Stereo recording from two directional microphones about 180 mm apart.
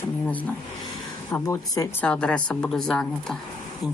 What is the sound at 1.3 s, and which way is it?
Speech, 20° left (ahead or behind).